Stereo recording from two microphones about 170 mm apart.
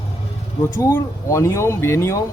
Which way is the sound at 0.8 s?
20° left (ahead or behind).